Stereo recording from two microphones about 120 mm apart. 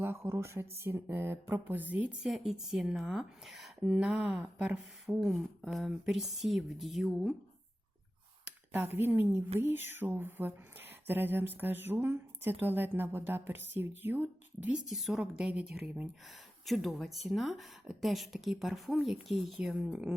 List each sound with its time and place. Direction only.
0.0 s speech: 20° right (ahead or behind); by 7.3 s centre (ahead or behind)
8.4 s speech: 15° right (ahead or behind)
14.8 s a woman's voice: centre (ahead or behind)
16.6 s a woman's voice: centre (ahead or behind)